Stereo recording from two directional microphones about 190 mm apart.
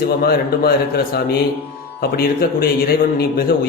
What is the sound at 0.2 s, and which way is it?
A man's voice, 55° left (ahead or behind).